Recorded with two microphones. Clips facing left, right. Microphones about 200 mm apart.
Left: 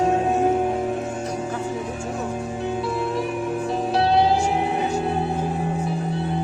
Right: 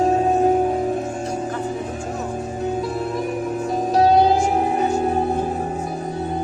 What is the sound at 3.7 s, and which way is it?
Music, 40° right (ahead or behind).